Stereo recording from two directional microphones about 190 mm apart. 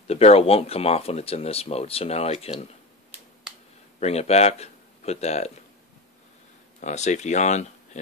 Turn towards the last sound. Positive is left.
turn(degrees=40)  # may be behind; listen again after turning